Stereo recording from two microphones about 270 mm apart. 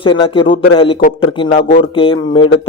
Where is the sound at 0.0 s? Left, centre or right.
Centre.